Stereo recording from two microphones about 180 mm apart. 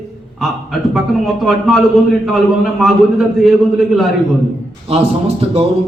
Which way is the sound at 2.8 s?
Centre (ahead or behind).